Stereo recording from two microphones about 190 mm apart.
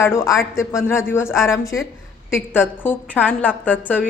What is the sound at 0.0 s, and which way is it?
A woman's voice, 15° left (ahead or behind).